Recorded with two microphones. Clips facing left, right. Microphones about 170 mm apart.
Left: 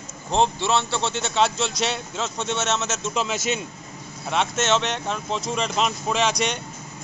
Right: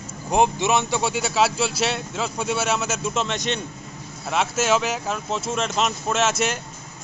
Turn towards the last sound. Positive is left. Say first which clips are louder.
# right 1 dB
turn(degrees=-5)  # may be behind; listen again after turning